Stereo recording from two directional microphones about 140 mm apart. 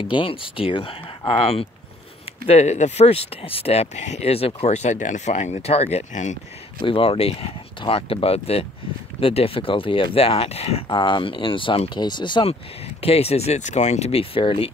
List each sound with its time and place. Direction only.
0.0 s speech: 35° left (ahead or behind); by 6.3 s 55° left (ahead or behind)
6.9 s speech: 40° left (ahead or behind)
13.0 s speech: 45° left (ahead or behind)